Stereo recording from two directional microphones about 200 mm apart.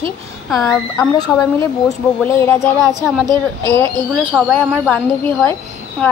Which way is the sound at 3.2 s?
20° right (ahead or behind).